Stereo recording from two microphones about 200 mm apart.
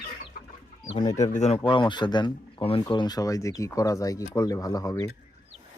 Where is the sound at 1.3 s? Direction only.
35° left (ahead or behind); by 5.0 s 15° left (ahead or behind).